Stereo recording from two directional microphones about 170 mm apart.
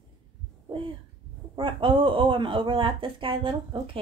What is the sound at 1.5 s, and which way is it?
Speech, 30° right (ahead or behind).